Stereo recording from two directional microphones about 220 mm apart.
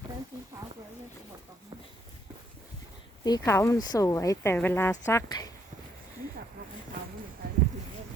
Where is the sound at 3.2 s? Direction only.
15° left (ahead or behind).